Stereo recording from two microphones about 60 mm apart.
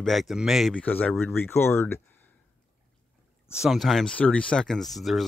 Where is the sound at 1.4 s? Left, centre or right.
Left.